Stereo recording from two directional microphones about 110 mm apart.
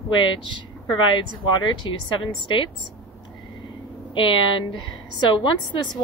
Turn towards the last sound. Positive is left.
turn(degrees=45)  # may be behind; listen again after turning